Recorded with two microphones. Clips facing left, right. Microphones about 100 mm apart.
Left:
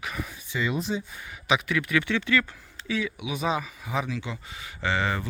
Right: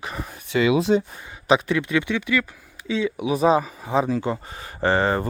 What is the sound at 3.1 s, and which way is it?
Speech, 40° right (ahead or behind).